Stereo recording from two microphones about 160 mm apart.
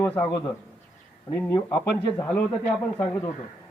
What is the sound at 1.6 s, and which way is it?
Speech, 15° left (ahead or behind).